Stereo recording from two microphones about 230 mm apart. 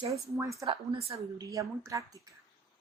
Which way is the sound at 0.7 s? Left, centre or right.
Right.